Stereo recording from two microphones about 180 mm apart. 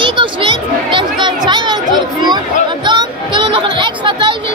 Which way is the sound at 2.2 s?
25° right (ahead or behind).